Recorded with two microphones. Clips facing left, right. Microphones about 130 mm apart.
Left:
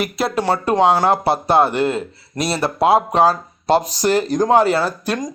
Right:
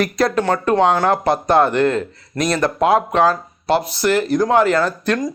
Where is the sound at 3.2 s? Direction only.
40° left (ahead or behind).